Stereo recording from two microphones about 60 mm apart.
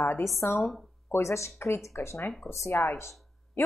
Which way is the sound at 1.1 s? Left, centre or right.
Left.